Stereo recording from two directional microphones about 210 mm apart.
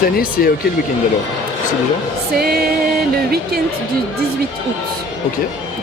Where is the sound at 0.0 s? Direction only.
45° left (ahead or behind).